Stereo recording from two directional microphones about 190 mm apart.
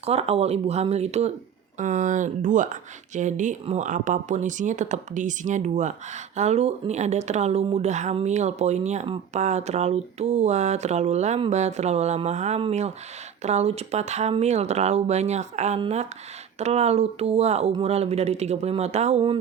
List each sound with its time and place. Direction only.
0.0 s speech: 35° right (ahead or behind)